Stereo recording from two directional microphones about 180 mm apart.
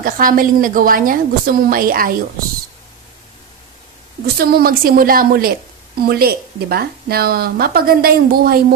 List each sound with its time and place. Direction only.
0.0 s a woman's voice: 50° right (ahead or behind)
4.4 s speech: 55° right (ahead or behind)